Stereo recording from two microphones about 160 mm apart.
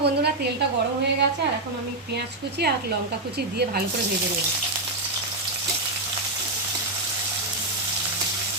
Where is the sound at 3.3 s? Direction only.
80° right.